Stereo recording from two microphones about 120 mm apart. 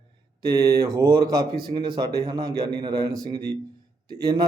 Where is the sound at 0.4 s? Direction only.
30° right (ahead or behind).